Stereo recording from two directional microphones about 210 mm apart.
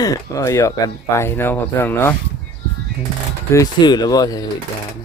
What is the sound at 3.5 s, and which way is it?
Speech, 20° left (ahead or behind).